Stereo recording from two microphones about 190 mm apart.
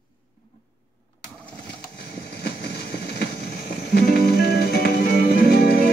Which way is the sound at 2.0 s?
55° left (ahead or behind).